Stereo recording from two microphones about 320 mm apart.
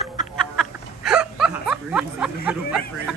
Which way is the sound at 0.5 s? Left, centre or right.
Centre.